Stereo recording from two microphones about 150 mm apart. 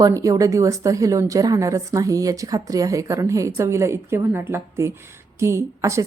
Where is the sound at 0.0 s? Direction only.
20° right (ahead or behind).